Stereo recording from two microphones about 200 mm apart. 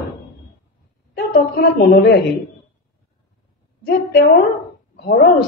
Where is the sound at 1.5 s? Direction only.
50° left (ahead or behind).